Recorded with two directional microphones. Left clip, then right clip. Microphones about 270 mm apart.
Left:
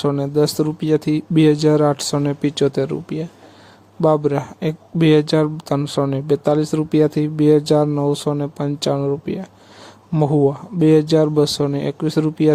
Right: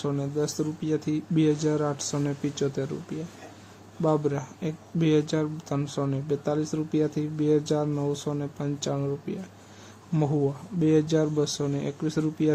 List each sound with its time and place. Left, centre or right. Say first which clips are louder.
0.0 s speech: left 11 dB; left